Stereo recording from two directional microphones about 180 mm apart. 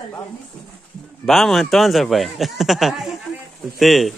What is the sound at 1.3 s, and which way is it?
Speech, centre (ahead or behind).